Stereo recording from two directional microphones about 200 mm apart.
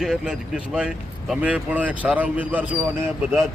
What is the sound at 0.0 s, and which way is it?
Speech, centre (ahead or behind).